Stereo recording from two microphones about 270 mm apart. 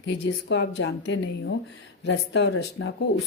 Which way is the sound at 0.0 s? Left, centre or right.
Left.